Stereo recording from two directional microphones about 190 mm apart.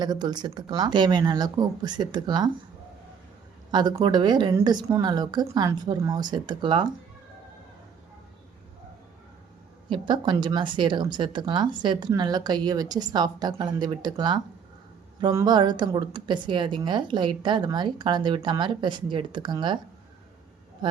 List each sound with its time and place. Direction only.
0.0 s a woman's voice: 20° right (ahead or behind)
3.7 s a woman's voice: 20° right (ahead or behind)
9.9 s a woman's voice: 25° right (ahead or behind)